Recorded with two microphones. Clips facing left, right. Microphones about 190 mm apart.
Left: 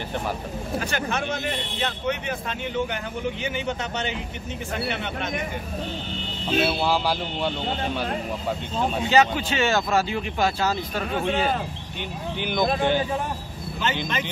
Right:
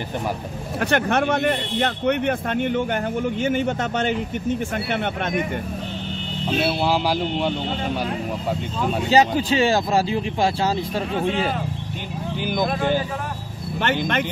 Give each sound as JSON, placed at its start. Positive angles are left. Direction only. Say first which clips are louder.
{"t": 0.7, "sound": "speech", "louder": "right 8 dB", "side_deg": -60}
{"t": 6.8, "sound": "speech", "louder": "right 3 dB", "side_deg": -15}
{"t": 9.1, "sound": "speech", "louder": "right 4 dB", "side_deg": -35}
{"t": 12.4, "sound": "speech", "louder": "right 1 dB", "side_deg": -5}
{"t": 13.7, "sound": "speech", "louder": "right 5 dB", "side_deg": -65}